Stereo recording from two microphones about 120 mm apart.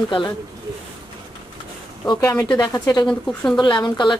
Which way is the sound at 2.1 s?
30° left (ahead or behind).